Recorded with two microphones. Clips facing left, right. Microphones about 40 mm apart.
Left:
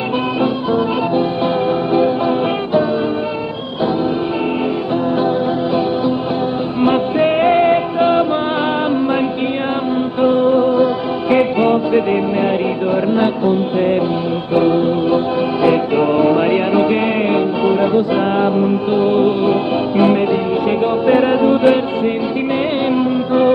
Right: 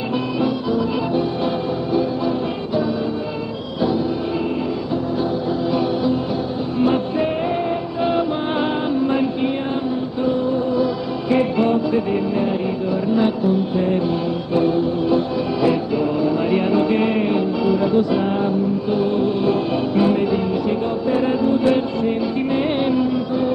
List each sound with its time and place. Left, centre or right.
0.4 s music: left
6.8 s music: left
8.0 s music: left
10.2 s music: left
21.6 s music: left